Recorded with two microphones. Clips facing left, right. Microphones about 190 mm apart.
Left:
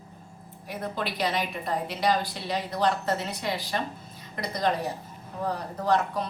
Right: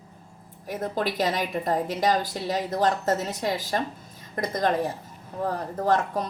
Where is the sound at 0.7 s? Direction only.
45° right (ahead or behind).